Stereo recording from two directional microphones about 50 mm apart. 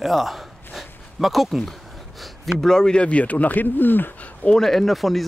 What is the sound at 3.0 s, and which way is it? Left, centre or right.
Speech, left.